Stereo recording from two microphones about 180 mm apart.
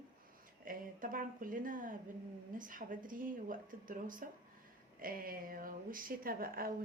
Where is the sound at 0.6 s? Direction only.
50° right (ahead or behind).